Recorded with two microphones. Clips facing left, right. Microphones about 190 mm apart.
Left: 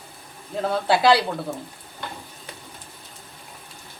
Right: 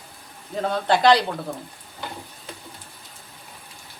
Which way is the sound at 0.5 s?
5° left (ahead or behind).